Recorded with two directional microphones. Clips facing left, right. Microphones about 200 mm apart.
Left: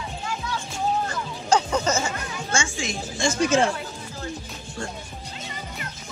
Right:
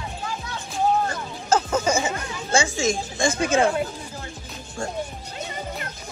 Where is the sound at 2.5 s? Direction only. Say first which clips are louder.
Right 7 dB; 40° right (ahead or behind).